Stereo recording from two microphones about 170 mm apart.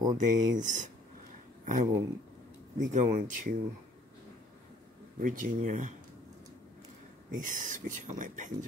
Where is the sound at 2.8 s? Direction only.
50° right (ahead or behind).